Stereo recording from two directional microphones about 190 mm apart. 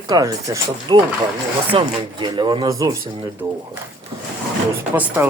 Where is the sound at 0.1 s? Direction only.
20° right (ahead or behind).